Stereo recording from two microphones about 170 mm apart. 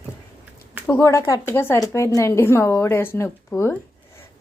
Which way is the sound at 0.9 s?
15° left (ahead or behind).